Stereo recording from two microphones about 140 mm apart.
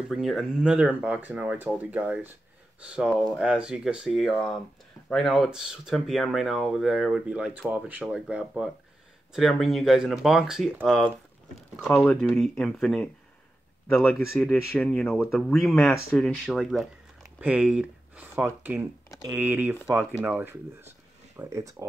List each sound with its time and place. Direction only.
0.1 s speech: centre (ahead or behind)
10.8 s speech: 5° left (ahead or behind)
14.3 s speech: 15° left (ahead or behind); by 21.8 s 20° right (ahead or behind)